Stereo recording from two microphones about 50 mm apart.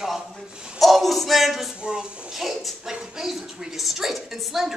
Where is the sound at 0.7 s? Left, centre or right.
Centre.